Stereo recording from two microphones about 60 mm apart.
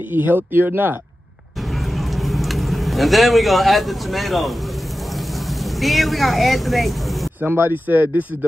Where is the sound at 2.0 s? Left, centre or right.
Centre.